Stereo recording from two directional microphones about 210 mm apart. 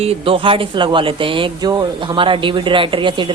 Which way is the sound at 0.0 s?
25° right (ahead or behind).